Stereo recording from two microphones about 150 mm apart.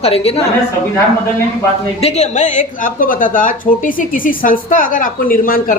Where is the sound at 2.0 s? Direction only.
45° left (ahead or behind).